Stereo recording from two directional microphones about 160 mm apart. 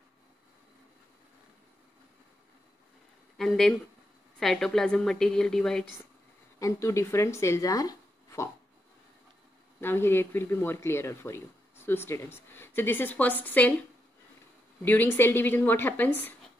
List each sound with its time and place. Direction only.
3.3 s a woman's voice: 5° left (ahead or behind)
6.6 s speech: 20° left (ahead or behind)
9.8 s speech: 15° left (ahead or behind)
14.9 s speech: 10° left (ahead or behind)